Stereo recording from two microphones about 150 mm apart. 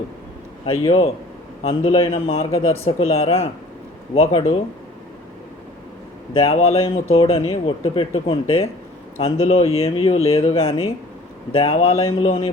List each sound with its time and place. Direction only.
0.6 s a man's voice: 45° left (ahead or behind)
6.3 s a man's voice: 40° left (ahead or behind)